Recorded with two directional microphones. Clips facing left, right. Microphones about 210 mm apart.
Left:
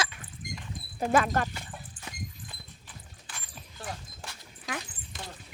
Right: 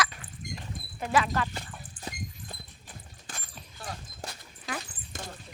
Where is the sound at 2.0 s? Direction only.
40° right (ahead or behind).